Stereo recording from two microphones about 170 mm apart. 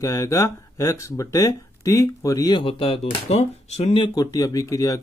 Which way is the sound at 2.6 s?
35° left (ahead or behind).